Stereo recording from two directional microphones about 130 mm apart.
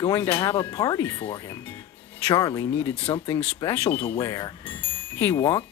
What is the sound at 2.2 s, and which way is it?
Speech, 30° left (ahead or behind).